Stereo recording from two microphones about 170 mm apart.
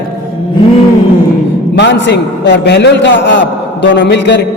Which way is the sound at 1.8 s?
90° left.